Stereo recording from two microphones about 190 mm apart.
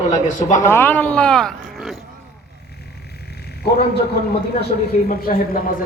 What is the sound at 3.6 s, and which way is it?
Speech, 55° left (ahead or behind).